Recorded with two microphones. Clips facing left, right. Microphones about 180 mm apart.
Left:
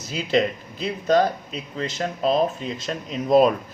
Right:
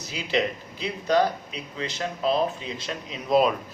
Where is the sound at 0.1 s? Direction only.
45° left (ahead or behind).